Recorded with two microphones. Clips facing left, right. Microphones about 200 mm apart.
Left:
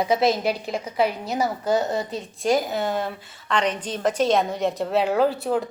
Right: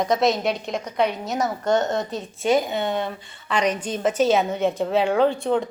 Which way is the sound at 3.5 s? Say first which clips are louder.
Right 1 dB; 10° right (ahead or behind).